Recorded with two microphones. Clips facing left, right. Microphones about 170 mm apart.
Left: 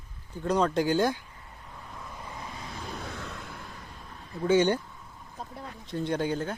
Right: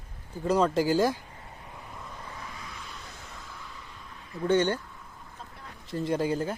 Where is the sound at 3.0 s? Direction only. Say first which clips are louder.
Left 7 dB; 75° left (ahead or behind); by 3.7 s 60° left (ahead or behind).